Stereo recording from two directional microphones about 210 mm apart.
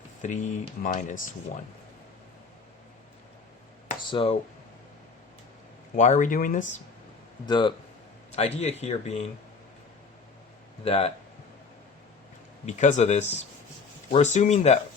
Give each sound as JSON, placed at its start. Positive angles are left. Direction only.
{"t": 0.2, "sound": "speech", "side_deg": 35}
{"t": 4.1, "sound": "speech", "side_deg": 25}
{"t": 6.0, "sound": "speech", "side_deg": 35}
{"t": 7.4, "sound": "speech", "side_deg": 20}
{"t": 10.8, "sound": "speech", "side_deg": 30}
{"t": 12.6, "sound": "speech", "side_deg": 35}